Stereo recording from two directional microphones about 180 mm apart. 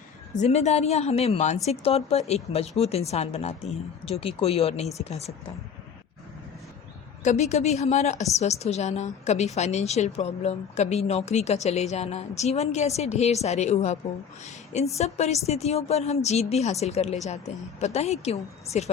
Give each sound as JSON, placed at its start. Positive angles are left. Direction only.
{"t": 0.3, "sound": "a woman's voice", "side_deg": 40}
{"t": 7.3, "sound": "a woman's voice", "side_deg": 40}